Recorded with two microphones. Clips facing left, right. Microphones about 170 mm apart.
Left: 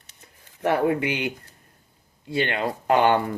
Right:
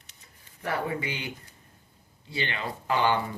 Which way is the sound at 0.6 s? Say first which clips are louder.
Left 9 dB; 70° left (ahead or behind).